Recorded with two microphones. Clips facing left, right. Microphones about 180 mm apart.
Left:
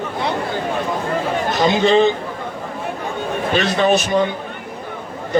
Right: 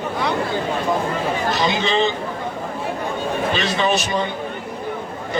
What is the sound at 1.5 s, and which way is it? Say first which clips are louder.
Speech: left 9 dB; 50° left (ahead or behind).